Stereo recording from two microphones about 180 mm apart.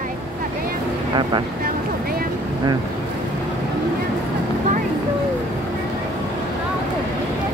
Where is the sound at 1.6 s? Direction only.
55° right (ahead or behind).